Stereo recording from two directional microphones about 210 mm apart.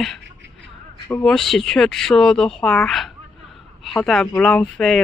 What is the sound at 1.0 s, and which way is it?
Speech, 5° left (ahead or behind).